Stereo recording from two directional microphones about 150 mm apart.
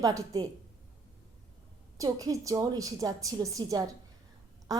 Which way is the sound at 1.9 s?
25° right (ahead or behind).